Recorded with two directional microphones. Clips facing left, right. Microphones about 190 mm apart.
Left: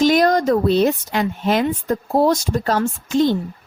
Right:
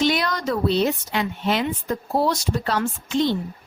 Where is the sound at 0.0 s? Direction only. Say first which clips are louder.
Left 7 dB; 45° left (ahead or behind).